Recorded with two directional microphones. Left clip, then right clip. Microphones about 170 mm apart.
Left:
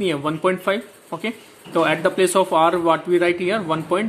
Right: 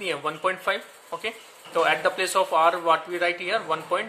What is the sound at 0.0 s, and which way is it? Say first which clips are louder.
Speech: left 6 dB; 15° left (ahead or behind).